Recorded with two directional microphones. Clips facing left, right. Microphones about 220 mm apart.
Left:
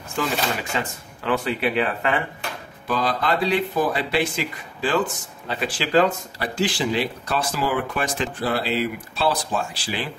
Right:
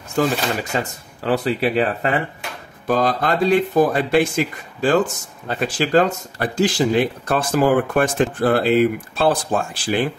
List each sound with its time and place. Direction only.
0.1 s speech: 40° right (ahead or behind)